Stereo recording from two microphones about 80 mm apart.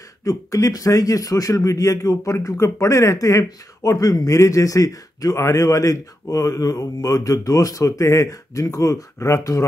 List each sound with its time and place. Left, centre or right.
0.2 s speech: left